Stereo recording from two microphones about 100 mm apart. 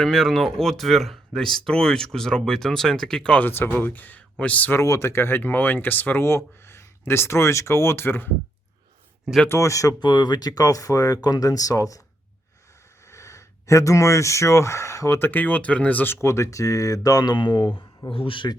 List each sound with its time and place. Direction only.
0.0 s speech: 5° left (ahead or behind)
4.8 s speech: 30° left (ahead or behind)
9.5 s speech: 30° left (ahead or behind)
10.0 s speech: 45° left (ahead or behind)
13.1 s speech: 30° left (ahead or behind)
16.2 s speech: 30° left (ahead or behind); by 18.4 s 65° left (ahead or behind)